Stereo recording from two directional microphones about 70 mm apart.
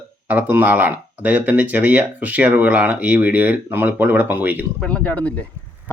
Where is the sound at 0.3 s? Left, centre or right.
Right.